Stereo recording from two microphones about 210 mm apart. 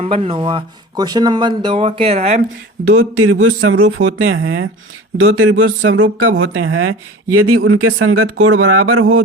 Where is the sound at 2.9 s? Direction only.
75° right (ahead or behind).